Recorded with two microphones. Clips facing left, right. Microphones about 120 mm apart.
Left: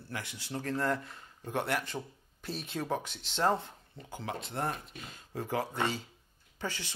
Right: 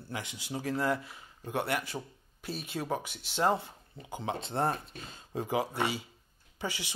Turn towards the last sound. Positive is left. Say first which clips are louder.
# right 1 dB
turn(degrees=-10)  # may be behind; listen again after turning